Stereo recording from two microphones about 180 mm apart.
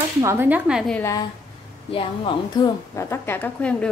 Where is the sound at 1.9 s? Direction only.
30° left (ahead or behind).